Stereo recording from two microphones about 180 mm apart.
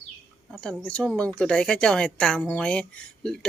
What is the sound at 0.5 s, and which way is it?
A woman's voice, 5° left (ahead or behind).